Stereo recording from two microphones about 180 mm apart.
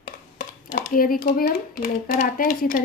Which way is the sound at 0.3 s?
50° left (ahead or behind).